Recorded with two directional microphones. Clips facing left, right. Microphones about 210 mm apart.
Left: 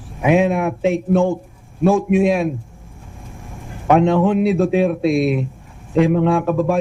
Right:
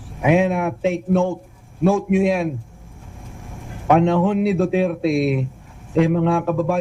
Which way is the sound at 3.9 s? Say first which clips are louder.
Left 2 dB; 15° left (ahead or behind).